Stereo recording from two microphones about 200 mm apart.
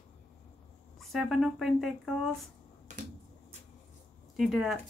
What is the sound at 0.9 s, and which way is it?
Speech, centre (ahead or behind).